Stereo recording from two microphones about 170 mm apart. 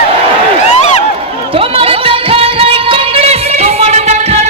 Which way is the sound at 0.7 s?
40° left (ahead or behind).